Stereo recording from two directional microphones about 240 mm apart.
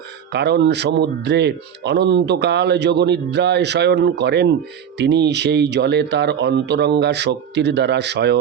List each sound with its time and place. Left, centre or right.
0.3 s speech: right